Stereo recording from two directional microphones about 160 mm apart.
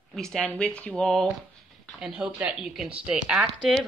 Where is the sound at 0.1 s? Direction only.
Centre (ahead or behind).